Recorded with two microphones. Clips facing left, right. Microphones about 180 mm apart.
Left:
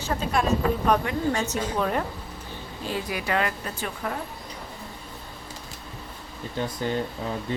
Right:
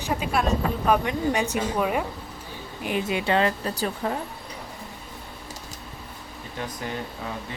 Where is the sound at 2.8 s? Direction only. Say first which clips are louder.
Right 4 dB; 20° right (ahead or behind).